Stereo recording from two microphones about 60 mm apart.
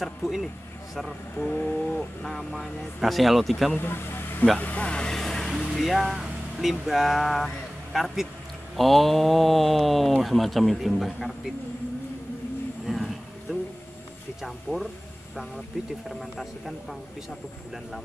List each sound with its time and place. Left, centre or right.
0.0 s speech: centre
1.3 s a sound: left
2.2 s speech: centre
3.7 s speech: left
4.6 s speech: left; by 11.5 s centre
12.8 s a sound: centre
14.4 s speech: centre
16.1 s speech: centre